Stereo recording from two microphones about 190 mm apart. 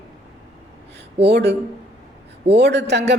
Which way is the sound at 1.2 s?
60° right (ahead or behind).